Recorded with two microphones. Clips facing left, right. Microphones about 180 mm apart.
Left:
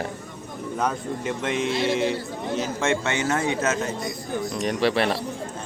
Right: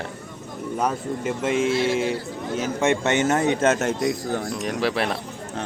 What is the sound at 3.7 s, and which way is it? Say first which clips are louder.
Speech: right 5 dB; 80° right.